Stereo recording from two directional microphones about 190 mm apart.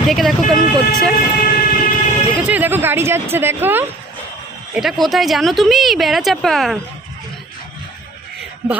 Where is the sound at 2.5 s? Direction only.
10° right (ahead or behind).